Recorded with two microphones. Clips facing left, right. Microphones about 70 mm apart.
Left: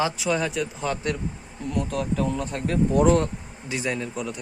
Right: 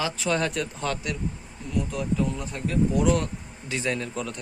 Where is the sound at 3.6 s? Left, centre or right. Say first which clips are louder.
Left 1 dB; centre.